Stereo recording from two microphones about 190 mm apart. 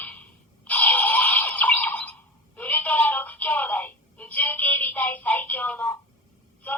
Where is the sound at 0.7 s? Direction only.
10° left (ahead or behind).